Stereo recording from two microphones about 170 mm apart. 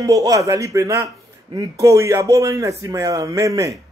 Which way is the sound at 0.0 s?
20° right (ahead or behind).